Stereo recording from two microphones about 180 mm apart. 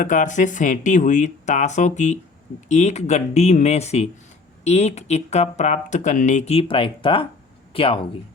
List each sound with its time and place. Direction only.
0.0 s speech: 45° left (ahead or behind)